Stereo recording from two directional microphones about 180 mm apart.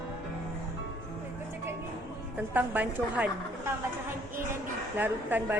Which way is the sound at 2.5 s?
10° right (ahead or behind).